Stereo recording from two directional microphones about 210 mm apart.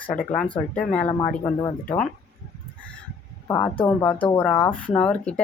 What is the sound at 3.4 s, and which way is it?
A woman's voice, 10° left (ahead or behind).